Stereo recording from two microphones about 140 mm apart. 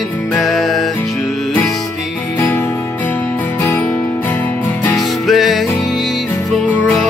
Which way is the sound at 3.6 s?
15° left (ahead or behind).